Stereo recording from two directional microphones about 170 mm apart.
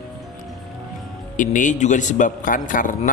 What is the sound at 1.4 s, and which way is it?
A man's voice, 50° left (ahead or behind).